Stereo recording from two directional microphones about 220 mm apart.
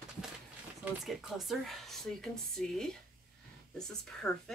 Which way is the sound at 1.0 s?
Centre (ahead or behind).